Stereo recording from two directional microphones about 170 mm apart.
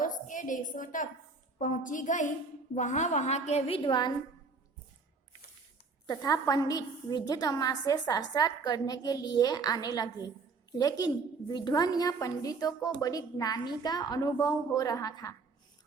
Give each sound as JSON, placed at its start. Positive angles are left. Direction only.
{"t": 0.0, "sound": "a woman's voice", "side_deg": 50}
{"t": 6.1, "sound": "a woman's voice", "side_deg": 20}